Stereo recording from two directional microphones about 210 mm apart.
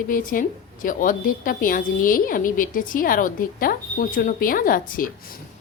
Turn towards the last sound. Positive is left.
turn(degrees=40)  # may be behind; listen again after turning